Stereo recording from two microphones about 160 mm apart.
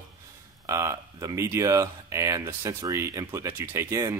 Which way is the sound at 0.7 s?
20° right (ahead or behind).